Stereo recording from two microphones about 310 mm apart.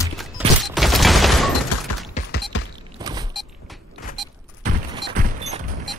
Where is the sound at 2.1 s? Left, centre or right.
Left.